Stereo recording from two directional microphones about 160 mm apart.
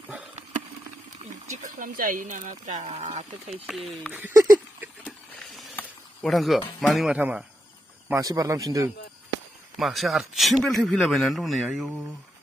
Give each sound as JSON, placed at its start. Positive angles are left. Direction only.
{"t": 1.2, "sound": "speech", "side_deg": -50}
{"t": 3.6, "sound": "a man's voice", "side_deg": 0}
{"t": 4.1, "sound": "speech", "side_deg": -15}
{"t": 5.3, "sound": "a sound", "side_deg": 0}
{"t": 6.8, "sound": "a man's voice", "side_deg": 0}
{"t": 8.1, "sound": "a man's voice", "side_deg": -20}
{"t": 9.8, "sound": "a man's voice", "side_deg": 0}